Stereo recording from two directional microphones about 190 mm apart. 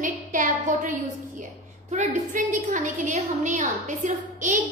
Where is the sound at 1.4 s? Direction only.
40° right (ahead or behind).